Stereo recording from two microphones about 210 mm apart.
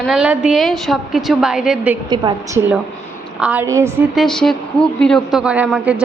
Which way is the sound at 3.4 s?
5° right (ahead or behind).